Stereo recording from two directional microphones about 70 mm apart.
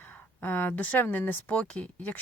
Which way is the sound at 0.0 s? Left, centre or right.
Left.